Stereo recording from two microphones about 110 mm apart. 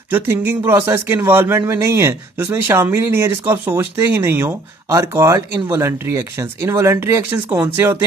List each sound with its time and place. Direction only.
0.1 s speech: 20° right (ahead or behind)